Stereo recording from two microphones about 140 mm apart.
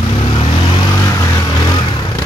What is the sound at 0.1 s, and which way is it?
Vehicle, 35° left (ahead or behind).